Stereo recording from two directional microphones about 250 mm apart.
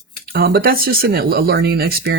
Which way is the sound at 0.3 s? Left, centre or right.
Right.